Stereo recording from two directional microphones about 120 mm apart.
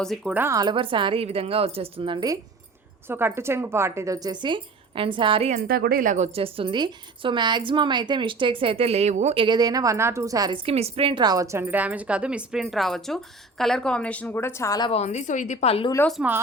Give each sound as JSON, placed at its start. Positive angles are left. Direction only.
{"t": 0.3, "sound": "speech", "side_deg": -15}
{"t": 0.5, "sound": "a woman's voice", "side_deg": -40}
{"t": 3.1, "sound": "a woman's voice", "side_deg": -20}
{"t": 6.1, "sound": "a woman's voice", "side_deg": -75}
{"t": 9.3, "sound": "a woman's voice", "side_deg": -50}
{"t": 9.6, "sound": "a woman's voice", "side_deg": -30}
{"t": 10.5, "sound": "a woman's voice", "side_deg": -50}
{"t": 11.2, "sound": "a woman's voice", "side_deg": -30}
{"t": 11.6, "sound": "a woman's voice", "side_deg": -15}
{"t": 14.9, "sound": "a woman's voice", "side_deg": 70}
{"t": 16.0, "sound": "speech", "side_deg": 20}